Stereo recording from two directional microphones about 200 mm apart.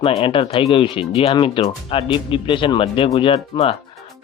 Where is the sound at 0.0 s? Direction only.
25° left (ahead or behind).